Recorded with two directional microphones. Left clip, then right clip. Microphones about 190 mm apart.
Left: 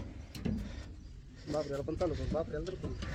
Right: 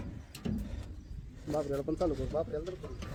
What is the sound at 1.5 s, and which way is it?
A man's voice, 40° right (ahead or behind).